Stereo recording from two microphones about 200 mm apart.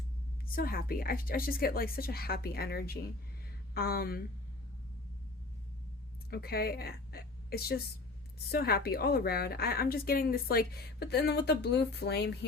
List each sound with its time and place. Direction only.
0.4 s a woman's voice: 45° left (ahead or behind)
6.3 s a woman's voice: 50° left (ahead or behind)